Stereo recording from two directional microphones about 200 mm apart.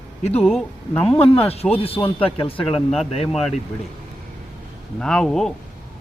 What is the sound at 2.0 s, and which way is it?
Speech, 20° left (ahead or behind).